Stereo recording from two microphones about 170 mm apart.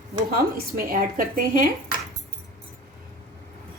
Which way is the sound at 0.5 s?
60° right (ahead or behind).